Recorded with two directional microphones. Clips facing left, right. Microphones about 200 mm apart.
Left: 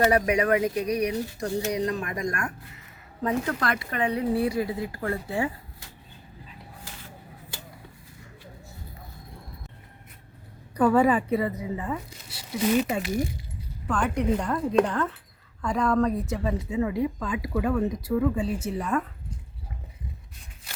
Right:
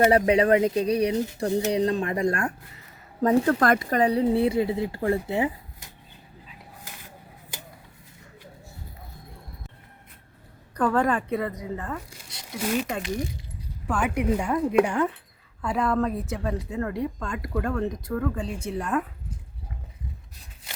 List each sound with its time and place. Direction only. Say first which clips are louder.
0.1 s speech: right 3 dB; 30° right (ahead or behind)
3.6 s speech: right 6 dB; 45° right (ahead or behind); by 5.5 s 20° right (ahead or behind)
10.8 s a woman's voice: left 3 dB; 10° left (ahead or behind)
13.8 s a woman's voice: even; 10° right (ahead or behind)